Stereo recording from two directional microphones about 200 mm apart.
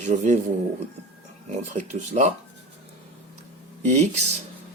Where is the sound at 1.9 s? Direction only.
35° right (ahead or behind).